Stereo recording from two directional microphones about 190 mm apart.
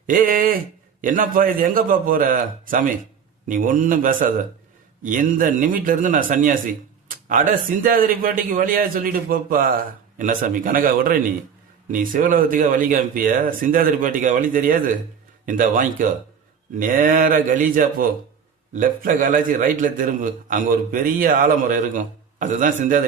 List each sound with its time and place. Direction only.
0.1 s a man's voice: 45° right (ahead or behind)